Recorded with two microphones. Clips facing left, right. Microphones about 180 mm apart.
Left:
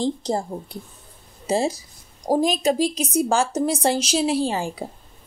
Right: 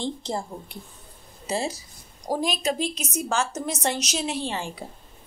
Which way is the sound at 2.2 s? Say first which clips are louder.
Left 6 dB; 40° left (ahead or behind).